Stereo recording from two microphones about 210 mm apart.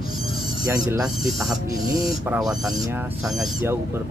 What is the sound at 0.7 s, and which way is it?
Speech, 15° right (ahead or behind).